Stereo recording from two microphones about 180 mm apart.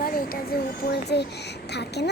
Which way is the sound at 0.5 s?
60° left (ahead or behind).